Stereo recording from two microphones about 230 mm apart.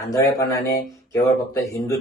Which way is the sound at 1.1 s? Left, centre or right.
Centre.